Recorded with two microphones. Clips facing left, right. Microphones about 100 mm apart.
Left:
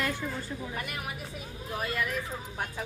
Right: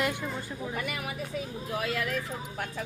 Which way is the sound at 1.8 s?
90° right.